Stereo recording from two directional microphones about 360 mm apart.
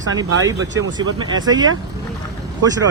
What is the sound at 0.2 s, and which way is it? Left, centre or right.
Speech, centre.